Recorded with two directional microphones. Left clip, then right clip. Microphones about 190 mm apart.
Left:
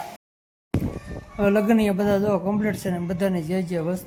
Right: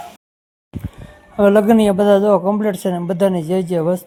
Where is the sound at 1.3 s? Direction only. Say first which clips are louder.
Right 8 dB; 30° right (ahead or behind).